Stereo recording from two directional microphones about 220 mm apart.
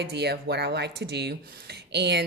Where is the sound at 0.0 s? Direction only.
50° right (ahead or behind).